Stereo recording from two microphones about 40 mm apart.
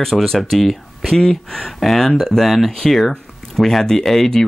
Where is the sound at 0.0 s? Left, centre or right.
Centre.